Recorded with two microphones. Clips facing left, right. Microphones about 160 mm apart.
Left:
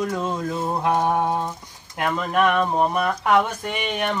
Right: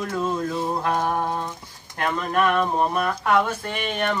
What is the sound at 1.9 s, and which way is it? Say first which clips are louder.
Speech: left 1 dB; 5° left (ahead or behind).